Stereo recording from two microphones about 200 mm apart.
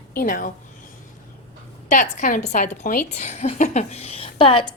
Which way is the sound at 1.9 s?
40° left (ahead or behind).